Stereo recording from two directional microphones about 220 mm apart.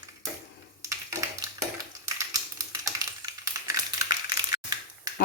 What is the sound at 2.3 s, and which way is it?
Typewriter, 15° right (ahead or behind).